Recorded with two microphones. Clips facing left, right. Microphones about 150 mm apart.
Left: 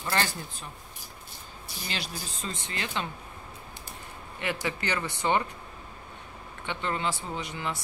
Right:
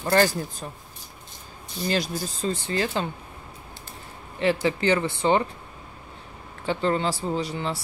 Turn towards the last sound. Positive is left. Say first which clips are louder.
# right 6 dB
turn(degrees=-30)  # may be behind; listen again after turning